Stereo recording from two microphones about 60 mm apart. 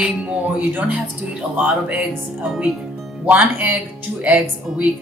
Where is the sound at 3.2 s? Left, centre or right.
Right.